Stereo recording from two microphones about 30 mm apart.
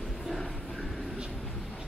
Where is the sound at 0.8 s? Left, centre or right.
Right.